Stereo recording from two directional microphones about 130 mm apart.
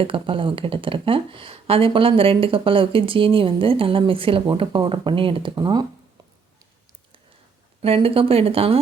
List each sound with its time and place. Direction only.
0.0 s speech: 45° right (ahead or behind)
7.8 s speech: 50° right (ahead or behind)